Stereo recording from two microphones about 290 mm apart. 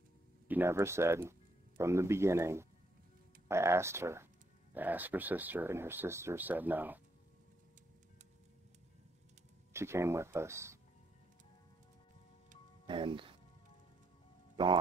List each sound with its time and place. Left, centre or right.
0.5 s speech: centre
9.7 s speech: centre
12.4 s music: centre
14.6 s speech: centre